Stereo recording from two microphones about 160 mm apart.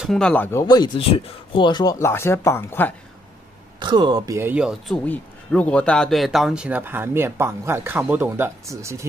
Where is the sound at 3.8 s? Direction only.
25° right (ahead or behind).